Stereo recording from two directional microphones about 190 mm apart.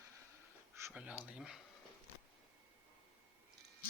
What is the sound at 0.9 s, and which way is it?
Speech, 10° right (ahead or behind).